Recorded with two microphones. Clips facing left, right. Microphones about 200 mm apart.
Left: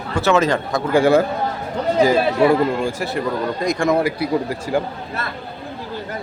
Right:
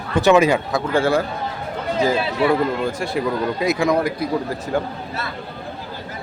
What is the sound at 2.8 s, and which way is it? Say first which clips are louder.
Speech: even; 5° left (ahead or behind).